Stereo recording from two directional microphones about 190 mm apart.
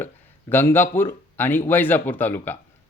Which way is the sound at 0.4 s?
10° left (ahead or behind).